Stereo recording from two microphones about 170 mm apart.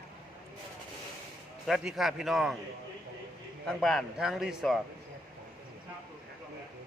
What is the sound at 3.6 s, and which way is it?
Speech, centre (ahead or behind).